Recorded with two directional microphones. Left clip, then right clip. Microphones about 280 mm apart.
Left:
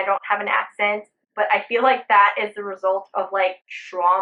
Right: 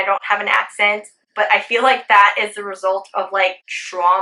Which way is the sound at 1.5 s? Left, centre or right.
Centre.